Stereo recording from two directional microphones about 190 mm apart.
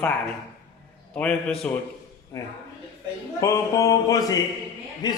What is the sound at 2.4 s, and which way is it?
A man's voice, 15° left (ahead or behind).